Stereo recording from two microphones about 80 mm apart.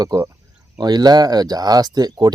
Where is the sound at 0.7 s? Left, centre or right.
Right.